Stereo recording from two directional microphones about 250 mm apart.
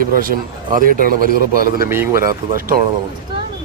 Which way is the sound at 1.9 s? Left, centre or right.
Centre.